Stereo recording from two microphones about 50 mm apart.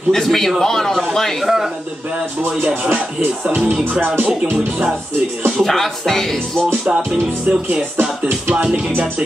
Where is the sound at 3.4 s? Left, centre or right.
Right.